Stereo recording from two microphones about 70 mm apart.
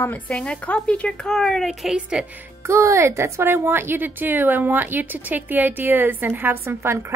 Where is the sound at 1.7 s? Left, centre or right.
Centre.